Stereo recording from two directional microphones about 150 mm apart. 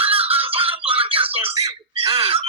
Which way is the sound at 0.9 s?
40° right (ahead or behind).